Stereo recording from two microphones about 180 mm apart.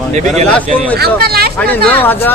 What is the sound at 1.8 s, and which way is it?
Speech, 10° left (ahead or behind).